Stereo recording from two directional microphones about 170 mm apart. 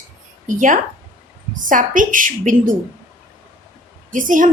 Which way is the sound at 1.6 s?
50° right (ahead or behind).